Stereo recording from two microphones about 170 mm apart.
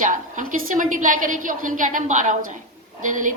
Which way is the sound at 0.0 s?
50° right (ahead or behind).